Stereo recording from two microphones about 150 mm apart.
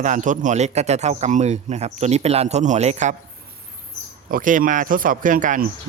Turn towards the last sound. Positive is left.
turn(degrees=-60)  # may be behind; listen again after turning